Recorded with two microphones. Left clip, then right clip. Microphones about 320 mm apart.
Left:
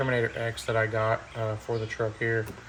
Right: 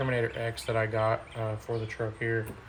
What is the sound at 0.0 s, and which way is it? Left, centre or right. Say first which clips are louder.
Speech: left 3 dB; centre.